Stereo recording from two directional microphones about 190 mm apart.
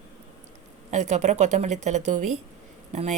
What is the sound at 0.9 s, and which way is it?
A woman's voice, 35° right (ahead or behind).